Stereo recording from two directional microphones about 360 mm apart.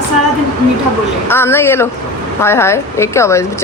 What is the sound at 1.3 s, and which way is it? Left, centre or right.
Speech, centre.